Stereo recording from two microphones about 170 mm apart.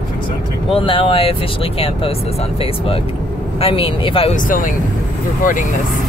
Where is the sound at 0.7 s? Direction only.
30° left (ahead or behind).